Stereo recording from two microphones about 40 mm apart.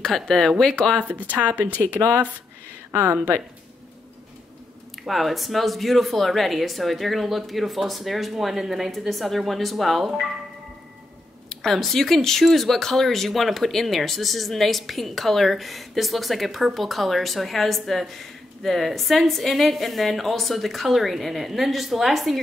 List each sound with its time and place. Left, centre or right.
0.0 s speech: centre
1.3 s speech: right
2.0 s speech: right
2.9 s speech: right
5.0 s speech: centre
11.4 s speech: centre